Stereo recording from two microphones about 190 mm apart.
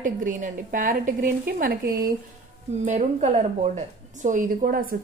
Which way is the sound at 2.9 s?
35° right (ahead or behind).